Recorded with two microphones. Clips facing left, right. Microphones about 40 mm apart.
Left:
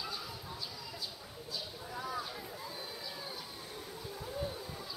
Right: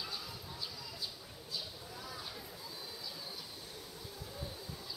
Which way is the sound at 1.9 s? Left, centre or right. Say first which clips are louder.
Left 7 dB; centre.